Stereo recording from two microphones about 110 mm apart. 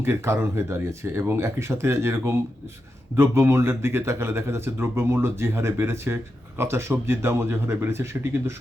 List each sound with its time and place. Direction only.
0.0 s speech: 25° right (ahead or behind)